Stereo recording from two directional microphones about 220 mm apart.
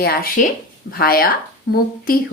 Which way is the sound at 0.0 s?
45° left (ahead or behind).